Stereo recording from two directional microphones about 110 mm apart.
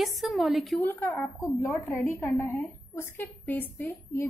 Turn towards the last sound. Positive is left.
turn(degrees=20)  # may be behind; listen again after turning